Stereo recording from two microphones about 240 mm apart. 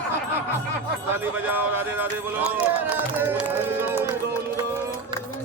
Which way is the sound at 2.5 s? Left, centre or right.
Centre.